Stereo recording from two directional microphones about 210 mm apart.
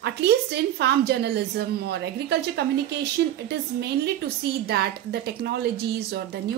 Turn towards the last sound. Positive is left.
turn(degrees=-50)  # may be behind; listen again after turning